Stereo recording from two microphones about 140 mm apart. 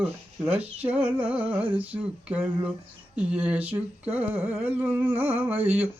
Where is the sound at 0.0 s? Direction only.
10° right (ahead or behind).